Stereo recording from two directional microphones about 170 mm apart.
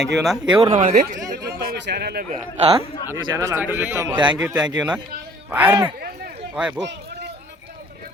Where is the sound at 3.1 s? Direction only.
15° right (ahead or behind).